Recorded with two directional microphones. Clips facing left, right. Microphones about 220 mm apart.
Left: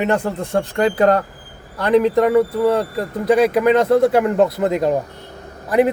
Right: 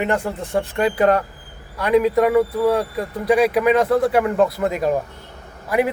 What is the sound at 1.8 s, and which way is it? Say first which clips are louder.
Speech: left 2 dB; 10° right (ahead or behind).